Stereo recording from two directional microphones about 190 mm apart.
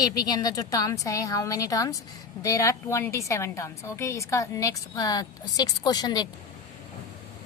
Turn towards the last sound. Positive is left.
turn(degrees=20)  # may be behind; listen again after turning